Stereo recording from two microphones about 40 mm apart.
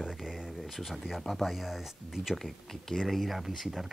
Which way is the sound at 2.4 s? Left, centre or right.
Centre.